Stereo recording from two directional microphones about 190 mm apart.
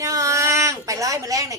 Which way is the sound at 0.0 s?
15° right (ahead or behind).